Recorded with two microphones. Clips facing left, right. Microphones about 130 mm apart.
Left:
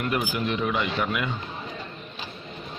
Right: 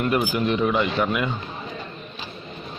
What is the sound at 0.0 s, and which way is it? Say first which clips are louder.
A man's voice: right 5 dB; 40° right (ahead or behind).